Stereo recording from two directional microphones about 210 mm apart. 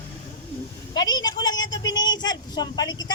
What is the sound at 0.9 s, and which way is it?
Speech, 20° left (ahead or behind).